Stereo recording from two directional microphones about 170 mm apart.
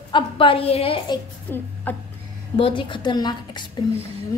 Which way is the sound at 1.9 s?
10° left (ahead or behind).